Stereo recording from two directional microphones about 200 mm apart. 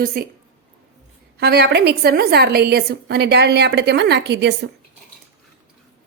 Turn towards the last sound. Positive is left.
turn(degrees=-60)  # may be behind; listen again after turning